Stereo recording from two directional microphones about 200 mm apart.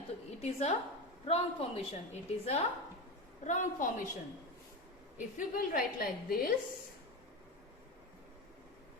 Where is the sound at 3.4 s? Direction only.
35° left (ahead or behind).